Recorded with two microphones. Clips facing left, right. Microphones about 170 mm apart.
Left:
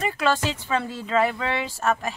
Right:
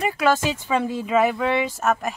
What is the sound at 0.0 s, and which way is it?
Speech, 10° right (ahead or behind).